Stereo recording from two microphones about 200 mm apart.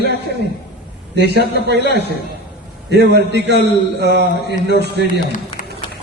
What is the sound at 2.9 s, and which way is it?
A man's voice, 55° right (ahead or behind).